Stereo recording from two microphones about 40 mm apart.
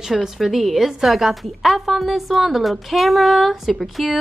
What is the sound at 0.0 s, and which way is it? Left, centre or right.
A woman's voice, centre.